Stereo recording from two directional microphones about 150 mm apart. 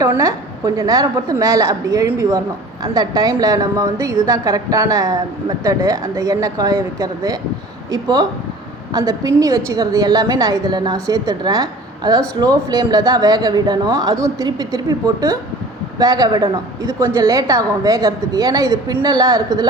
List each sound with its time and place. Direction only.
0.0 s a woman's voice: 25° right (ahead or behind)